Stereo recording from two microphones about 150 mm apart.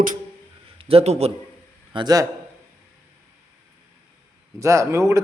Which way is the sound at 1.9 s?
30° right (ahead or behind).